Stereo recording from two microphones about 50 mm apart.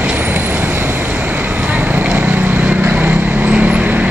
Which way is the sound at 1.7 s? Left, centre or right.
Right.